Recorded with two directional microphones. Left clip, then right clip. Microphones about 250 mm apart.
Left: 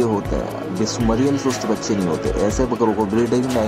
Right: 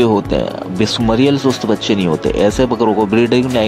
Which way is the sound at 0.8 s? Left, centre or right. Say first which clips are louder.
Right 7 dB; right.